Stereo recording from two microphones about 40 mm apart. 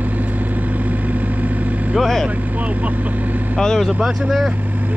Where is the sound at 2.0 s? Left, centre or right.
Centre.